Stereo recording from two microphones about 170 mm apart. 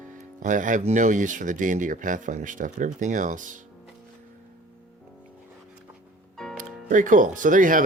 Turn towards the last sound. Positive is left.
turn(degrees=-50)  # may be behind; listen again after turning